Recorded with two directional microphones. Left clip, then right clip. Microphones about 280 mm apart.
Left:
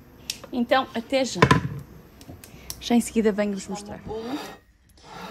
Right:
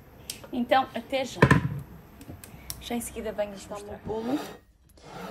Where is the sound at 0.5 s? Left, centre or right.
Left.